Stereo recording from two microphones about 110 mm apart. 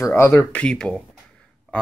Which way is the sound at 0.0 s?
25° left (ahead or behind).